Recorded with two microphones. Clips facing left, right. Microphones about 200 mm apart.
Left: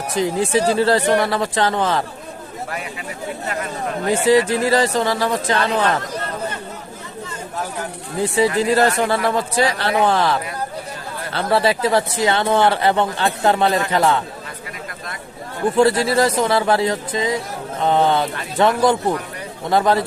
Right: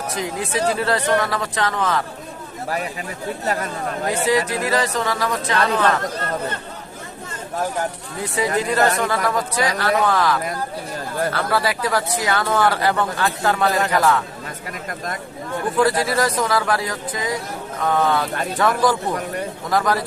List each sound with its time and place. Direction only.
0.1 s speech: 30° left (ahead or behind)
3.4 s speech: 40° right (ahead or behind)
4.3 s speech: 30° left (ahead or behind)
8.4 s speech: 30° left (ahead or behind)
15.7 s speech: 25° left (ahead or behind)